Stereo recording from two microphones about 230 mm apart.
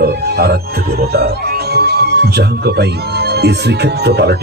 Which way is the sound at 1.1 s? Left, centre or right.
Right.